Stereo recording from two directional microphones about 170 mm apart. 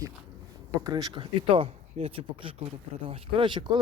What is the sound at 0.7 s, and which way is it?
Speech, 20° right (ahead or behind).